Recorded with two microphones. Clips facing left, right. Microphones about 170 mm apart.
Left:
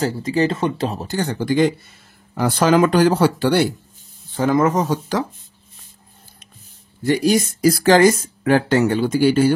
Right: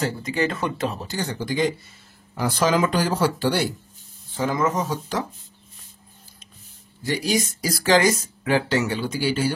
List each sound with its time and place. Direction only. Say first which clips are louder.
0.0 s speech: left 5 dB; 35° left (ahead or behind)
1.0 s speech: left 6 dB; 55° left (ahead or behind)
7.0 s speech: left 7 dB; 55° left (ahead or behind)